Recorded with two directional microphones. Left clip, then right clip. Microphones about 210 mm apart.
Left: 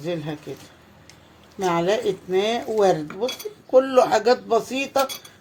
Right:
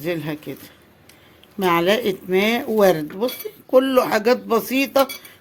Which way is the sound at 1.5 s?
45° right (ahead or behind).